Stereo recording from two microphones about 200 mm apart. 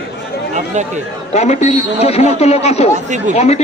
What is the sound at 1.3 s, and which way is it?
A man's voice, 35° left (ahead or behind).